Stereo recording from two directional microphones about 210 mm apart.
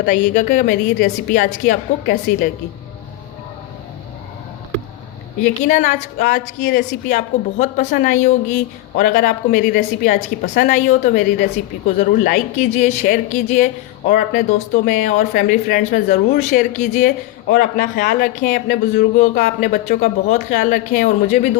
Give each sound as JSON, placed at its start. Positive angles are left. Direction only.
{"t": 0.0, "sound": "speech", "side_deg": 45}
{"t": 5.6, "sound": "speech", "side_deg": 35}
{"t": 6.6, "sound": "speech", "side_deg": 50}
{"t": 7.6, "sound": "speech", "side_deg": 35}